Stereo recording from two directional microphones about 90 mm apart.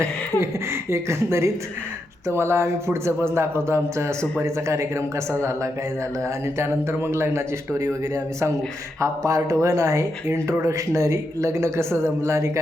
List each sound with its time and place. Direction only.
0.0 s speech: 30° right (ahead or behind)
6.2 s speech: 30° right (ahead or behind)